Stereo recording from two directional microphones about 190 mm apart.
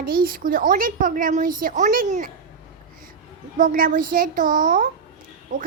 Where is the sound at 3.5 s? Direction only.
45° right (ahead or behind).